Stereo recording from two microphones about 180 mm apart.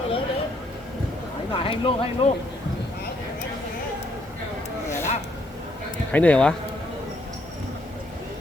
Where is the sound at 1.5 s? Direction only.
30° left (ahead or behind).